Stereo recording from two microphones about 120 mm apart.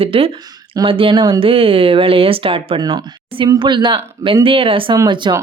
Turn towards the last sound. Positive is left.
turn(degrees=-35)  # may be behind; listen again after turning